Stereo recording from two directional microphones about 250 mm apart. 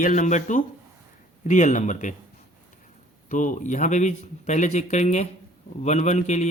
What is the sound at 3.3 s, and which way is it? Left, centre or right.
Speech, left.